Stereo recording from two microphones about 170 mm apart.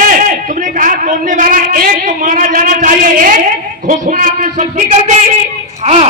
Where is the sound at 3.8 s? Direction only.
50° right (ahead or behind).